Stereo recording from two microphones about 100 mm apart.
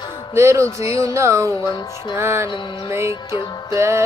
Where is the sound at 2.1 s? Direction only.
25° right (ahead or behind).